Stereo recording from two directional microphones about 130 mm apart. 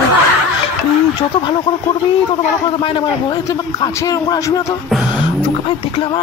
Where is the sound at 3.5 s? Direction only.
25° left (ahead or behind).